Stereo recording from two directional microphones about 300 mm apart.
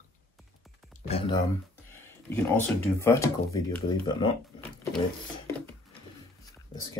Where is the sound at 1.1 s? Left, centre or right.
Centre.